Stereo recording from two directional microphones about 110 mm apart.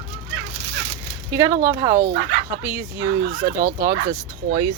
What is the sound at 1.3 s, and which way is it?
Speech, 30° right (ahead or behind).